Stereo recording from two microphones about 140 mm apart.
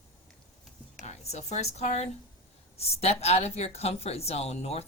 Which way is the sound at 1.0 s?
55° left (ahead or behind).